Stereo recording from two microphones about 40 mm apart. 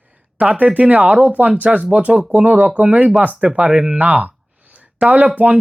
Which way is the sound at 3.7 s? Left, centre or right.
Right.